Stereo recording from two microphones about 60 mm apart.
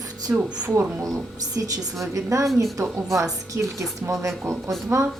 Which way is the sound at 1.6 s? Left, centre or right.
Right.